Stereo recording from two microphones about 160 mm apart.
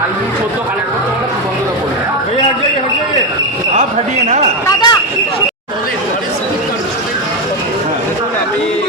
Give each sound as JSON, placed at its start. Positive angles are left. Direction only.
{"t": 4.6, "sound": "speech", "side_deg": 25}